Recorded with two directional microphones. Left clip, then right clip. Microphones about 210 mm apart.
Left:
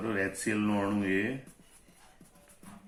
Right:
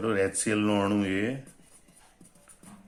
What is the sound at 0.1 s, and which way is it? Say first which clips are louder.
Speech: right 5 dB; 50° right (ahead or behind).